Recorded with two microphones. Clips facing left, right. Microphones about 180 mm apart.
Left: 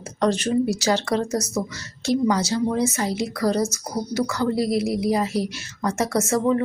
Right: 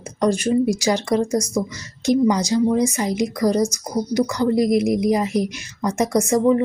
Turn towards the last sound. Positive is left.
turn(degrees=-15)  # may be behind; listen again after turning